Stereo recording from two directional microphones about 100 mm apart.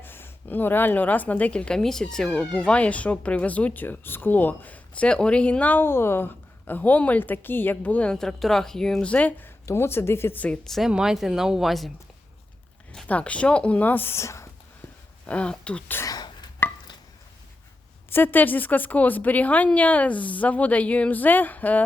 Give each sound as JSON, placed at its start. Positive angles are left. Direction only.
{"t": 0.0, "sound": "a woman's voice", "side_deg": 20}
{"t": 9.6, "sound": "speech", "side_deg": 25}
{"t": 12.9, "sound": "speech", "side_deg": 10}
{"t": 15.3, "sound": "speech", "side_deg": 10}
{"t": 16.0, "sound": "a sound", "side_deg": 40}
{"t": 18.1, "sound": "speech", "side_deg": 20}